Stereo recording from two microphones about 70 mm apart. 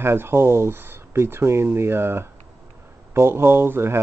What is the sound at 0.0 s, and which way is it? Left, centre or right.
Speech, right.